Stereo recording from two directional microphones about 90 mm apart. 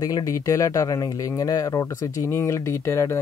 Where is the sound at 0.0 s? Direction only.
40° left (ahead or behind).